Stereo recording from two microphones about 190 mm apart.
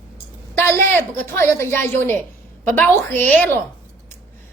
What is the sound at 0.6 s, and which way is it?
A woman's voice, 10° left (ahead or behind).